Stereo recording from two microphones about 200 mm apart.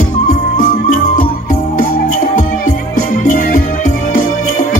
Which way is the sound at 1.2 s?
40° left (ahead or behind).